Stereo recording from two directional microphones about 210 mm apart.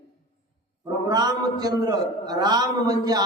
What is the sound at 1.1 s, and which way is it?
A man's voice, 20° right (ahead or behind).